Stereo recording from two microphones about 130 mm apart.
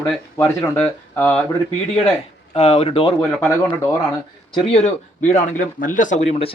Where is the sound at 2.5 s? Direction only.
50° left (ahead or behind).